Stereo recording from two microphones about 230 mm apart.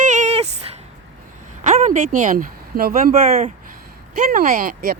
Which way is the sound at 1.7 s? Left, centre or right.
Right.